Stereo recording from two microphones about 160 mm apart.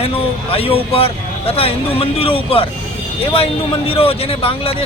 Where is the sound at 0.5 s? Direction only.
35° left (ahead or behind).